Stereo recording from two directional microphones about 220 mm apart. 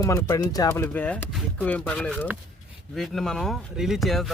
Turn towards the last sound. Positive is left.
turn(degrees=0)  # may be behind; listen again after turning